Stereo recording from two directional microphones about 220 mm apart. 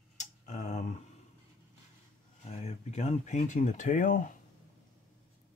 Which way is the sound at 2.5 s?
30° left (ahead or behind).